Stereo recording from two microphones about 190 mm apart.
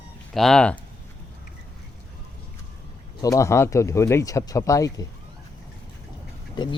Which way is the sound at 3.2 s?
15° left (ahead or behind).